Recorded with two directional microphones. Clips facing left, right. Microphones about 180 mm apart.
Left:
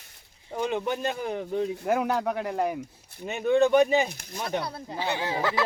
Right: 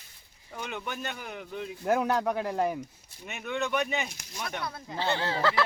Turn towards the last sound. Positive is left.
turn(degrees=15)  # may be behind; listen again after turning